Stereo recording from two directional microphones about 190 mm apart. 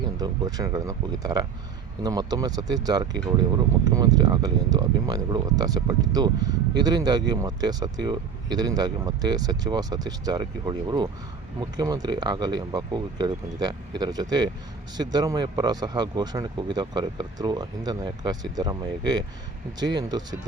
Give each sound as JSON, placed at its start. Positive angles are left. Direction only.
{"t": 0.2, "sound": "speech", "side_deg": -20}